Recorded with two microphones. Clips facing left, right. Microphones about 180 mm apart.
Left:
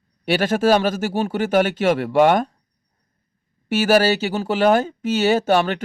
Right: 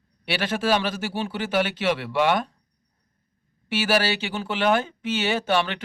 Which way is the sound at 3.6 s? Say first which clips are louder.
Left 7 dB; 45° left (ahead or behind).